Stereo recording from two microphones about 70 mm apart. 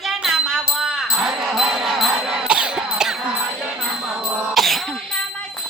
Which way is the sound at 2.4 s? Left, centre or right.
Centre.